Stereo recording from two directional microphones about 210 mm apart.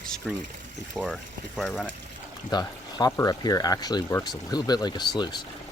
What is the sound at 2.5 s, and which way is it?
Speech, 20° left (ahead or behind).